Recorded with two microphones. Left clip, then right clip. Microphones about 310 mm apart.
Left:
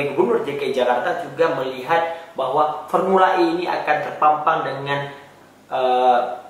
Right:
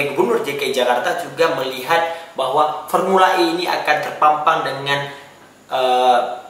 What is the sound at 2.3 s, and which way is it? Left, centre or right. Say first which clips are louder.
Speech: right 2 dB; left.